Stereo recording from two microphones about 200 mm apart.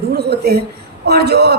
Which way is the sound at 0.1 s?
50° right (ahead or behind).